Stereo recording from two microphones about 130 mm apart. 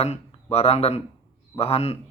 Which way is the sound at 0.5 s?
50° left (ahead or behind).